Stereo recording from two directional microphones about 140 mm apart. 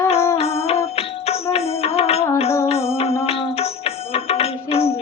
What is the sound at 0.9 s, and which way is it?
Music, 45° left (ahead or behind).